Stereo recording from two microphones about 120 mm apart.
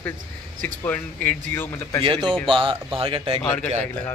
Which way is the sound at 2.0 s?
45° right (ahead or behind).